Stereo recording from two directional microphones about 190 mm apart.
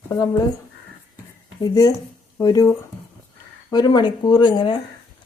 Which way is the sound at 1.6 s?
20° left (ahead or behind).